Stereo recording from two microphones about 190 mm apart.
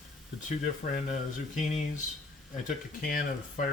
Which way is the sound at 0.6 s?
45° left (ahead or behind).